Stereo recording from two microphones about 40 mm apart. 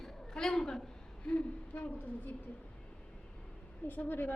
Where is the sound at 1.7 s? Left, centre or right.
Left.